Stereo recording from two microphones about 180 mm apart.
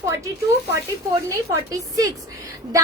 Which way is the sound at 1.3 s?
15° right (ahead or behind).